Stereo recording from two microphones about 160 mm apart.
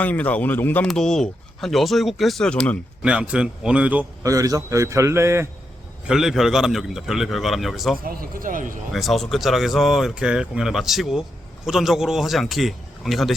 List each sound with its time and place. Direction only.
0.0 s speech: 10° left (ahead or behind)
3.0 s a man's voice: 5° right (ahead or behind)
4.2 s a man's voice: 20° right (ahead or behind)
6.1 s speech: centre (ahead or behind)
8.0 s speech: 60° right (ahead or behind)
8.9 s speech: centre (ahead or behind)